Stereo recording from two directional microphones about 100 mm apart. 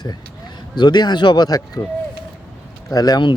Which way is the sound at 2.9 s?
40° left (ahead or behind).